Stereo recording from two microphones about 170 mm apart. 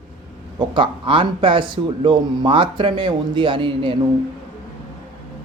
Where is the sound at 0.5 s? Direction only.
30° right (ahead or behind).